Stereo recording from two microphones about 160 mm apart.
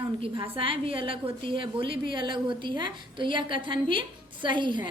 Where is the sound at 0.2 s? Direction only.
35° right (ahead or behind).